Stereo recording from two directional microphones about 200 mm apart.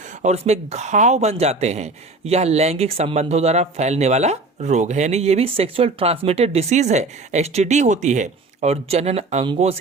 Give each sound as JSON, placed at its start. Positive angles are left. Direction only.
{"t": 0.2, "sound": "speech", "side_deg": -35}